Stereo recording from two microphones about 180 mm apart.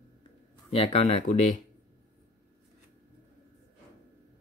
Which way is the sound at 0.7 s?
30° left (ahead or behind).